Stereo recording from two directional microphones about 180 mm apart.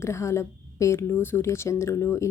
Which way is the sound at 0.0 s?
15° left (ahead or behind).